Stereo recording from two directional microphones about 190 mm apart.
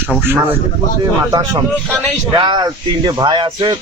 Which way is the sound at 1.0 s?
20° right (ahead or behind).